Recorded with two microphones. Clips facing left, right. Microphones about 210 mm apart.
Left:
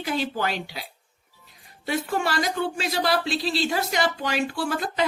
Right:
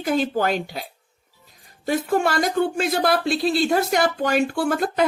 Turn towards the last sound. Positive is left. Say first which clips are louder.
# right 5 dB
turn(degrees=-55)  # may be behind; listen again after turning